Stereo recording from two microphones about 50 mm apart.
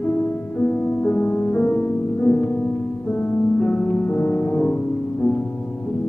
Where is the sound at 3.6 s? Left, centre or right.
Left.